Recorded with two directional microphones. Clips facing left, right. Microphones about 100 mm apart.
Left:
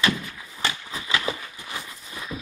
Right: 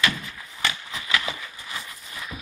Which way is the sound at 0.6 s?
30° left (ahead or behind).